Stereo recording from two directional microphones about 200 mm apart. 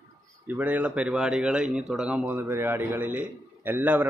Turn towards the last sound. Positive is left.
turn(degrees=-10)  # may be behind; listen again after turning